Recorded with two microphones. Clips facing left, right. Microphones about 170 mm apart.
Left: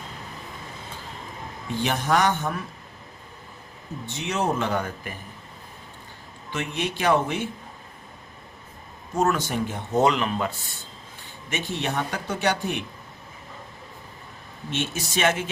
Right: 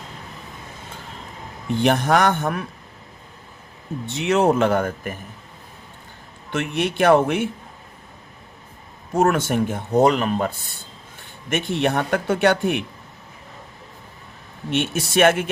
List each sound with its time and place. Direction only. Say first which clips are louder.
1.8 s speech: right 5 dB; 55° right (ahead or behind)
4.0 s speech: right 8 dB; 70° right (ahead or behind); by 5.1 s 50° right (ahead or behind)
6.5 s speech: right 5 dB; 55° right (ahead or behind)
9.2 s speech: right 5 dB; 50° right (ahead or behind)
10.0 s speech: right 4 dB; 40° right (ahead or behind)
11.4 s speech: right 7 dB; 55° right (ahead or behind)
14.7 s speech: right 6 dB; 60° right (ahead or behind)